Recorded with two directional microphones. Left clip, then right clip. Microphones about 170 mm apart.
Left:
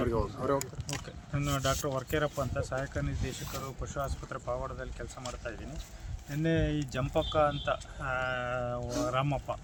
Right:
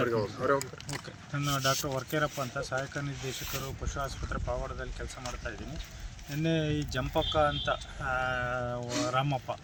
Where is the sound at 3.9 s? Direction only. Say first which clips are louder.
Right 1 dB; 10° left (ahead or behind).